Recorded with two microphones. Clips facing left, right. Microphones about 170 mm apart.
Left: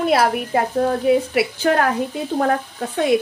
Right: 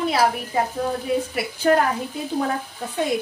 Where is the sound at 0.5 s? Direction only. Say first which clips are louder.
Left 5 dB; 65° left (ahead or behind).